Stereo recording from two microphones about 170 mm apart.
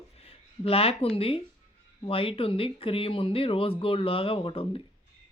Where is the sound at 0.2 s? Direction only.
35° left (ahead or behind).